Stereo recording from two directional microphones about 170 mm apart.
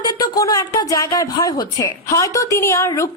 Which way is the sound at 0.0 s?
25° left (ahead or behind).